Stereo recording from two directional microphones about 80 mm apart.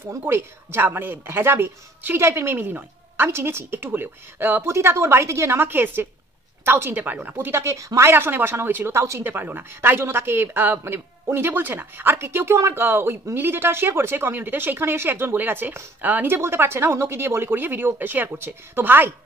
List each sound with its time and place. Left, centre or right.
0.3 s a woman's voice: right
9.3 s speech: right